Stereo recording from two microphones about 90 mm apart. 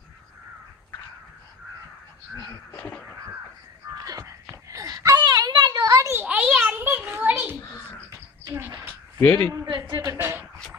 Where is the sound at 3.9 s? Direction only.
40° right (ahead or behind).